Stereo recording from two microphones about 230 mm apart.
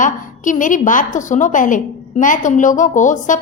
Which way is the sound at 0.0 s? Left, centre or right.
Left.